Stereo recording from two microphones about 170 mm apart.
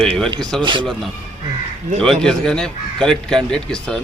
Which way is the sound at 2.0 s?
5° left (ahead or behind).